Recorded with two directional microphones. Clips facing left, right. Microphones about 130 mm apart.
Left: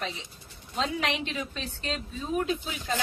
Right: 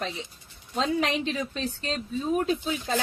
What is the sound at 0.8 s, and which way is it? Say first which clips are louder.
A woman's voice: right 4 dB; 40° right (ahead or behind).